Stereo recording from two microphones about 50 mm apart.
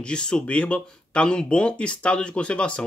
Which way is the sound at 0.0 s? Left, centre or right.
Centre.